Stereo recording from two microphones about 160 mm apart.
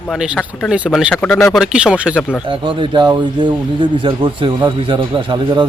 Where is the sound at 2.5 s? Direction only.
30° right (ahead or behind).